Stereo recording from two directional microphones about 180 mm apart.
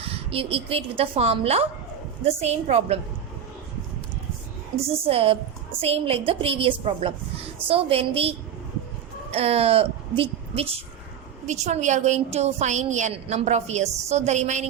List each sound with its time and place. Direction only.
0.0 s a woman's voice: 30° right (ahead or behind)
4.9 s a woman's voice: 30° right (ahead or behind)